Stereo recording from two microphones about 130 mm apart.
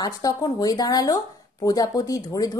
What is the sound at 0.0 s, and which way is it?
Speech, 30° left (ahead or behind).